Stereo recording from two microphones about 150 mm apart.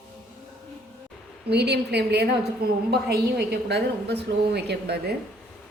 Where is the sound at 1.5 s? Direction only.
90° right.